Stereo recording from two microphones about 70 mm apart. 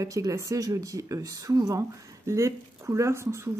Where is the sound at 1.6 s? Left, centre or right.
Right.